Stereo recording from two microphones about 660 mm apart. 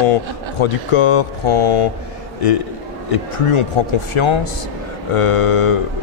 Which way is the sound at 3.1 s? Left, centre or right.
Left.